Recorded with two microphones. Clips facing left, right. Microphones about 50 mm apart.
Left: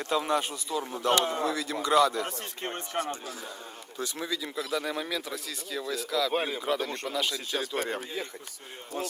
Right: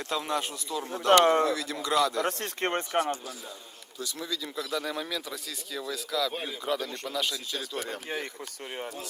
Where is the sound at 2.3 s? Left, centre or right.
Right.